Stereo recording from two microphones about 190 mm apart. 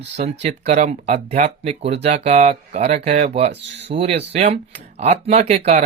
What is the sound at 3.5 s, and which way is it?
Speech, 65° right (ahead or behind).